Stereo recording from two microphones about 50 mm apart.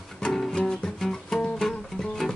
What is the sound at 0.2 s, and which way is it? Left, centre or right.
Music, centre.